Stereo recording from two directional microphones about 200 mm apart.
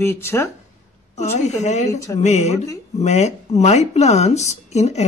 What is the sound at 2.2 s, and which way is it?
Speech, 35° left (ahead or behind).